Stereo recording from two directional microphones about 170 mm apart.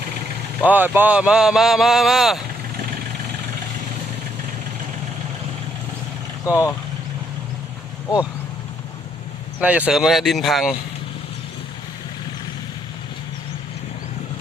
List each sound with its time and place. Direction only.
0.6 s speech: 10° right (ahead or behind)
6.4 s speech: 20° left (ahead or behind)
9.6 s speech: 10° right (ahead or behind)